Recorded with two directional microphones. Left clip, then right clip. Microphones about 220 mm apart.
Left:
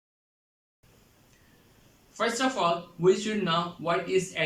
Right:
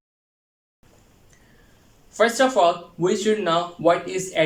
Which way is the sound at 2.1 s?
40° right (ahead or behind).